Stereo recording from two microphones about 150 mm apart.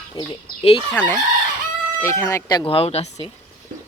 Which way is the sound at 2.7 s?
40° left (ahead or behind).